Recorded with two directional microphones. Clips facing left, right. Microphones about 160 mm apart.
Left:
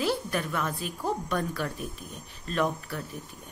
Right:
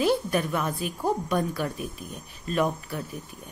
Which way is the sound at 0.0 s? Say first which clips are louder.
Right 5 dB; 15° right (ahead or behind).